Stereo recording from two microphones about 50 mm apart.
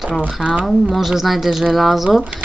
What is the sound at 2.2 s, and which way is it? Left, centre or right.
Speech, right.